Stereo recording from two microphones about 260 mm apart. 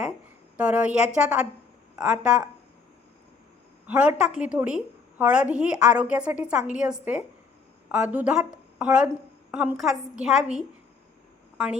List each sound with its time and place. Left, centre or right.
0.5 s a woman's voice: centre
3.8 s a woman's voice: centre